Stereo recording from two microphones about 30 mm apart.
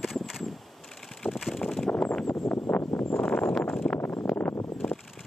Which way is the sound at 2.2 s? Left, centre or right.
Left.